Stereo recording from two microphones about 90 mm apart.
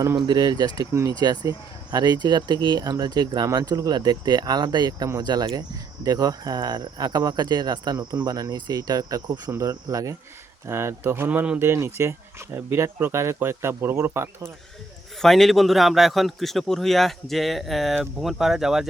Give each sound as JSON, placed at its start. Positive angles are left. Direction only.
{"t": 0.3, "sound": "speech", "side_deg": -50}
{"t": 9.5, "sound": "cricket", "side_deg": -35}
{"t": 10.7, "sound": "speech", "side_deg": -25}
{"t": 11.3, "sound": "speech", "side_deg": -15}
{"t": 11.6, "sound": "speech", "side_deg": -30}
{"t": 15.2, "sound": "a man's voice", "side_deg": 5}